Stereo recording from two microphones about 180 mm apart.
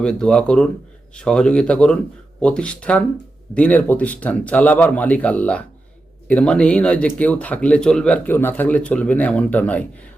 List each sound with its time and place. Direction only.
0.0 s speech: 5° left (ahead or behind)